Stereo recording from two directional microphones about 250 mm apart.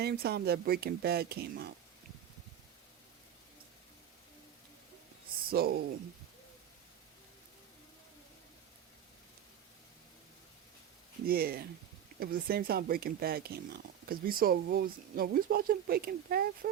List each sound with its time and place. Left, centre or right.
0.0 s speech: right
5.5 s speech: right
11.3 s speech: right